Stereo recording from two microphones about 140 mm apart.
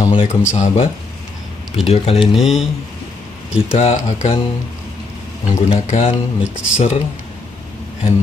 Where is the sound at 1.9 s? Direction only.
45° left (ahead or behind).